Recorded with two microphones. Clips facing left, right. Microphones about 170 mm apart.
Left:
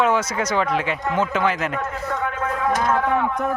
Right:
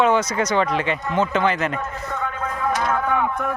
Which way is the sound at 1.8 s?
90° left.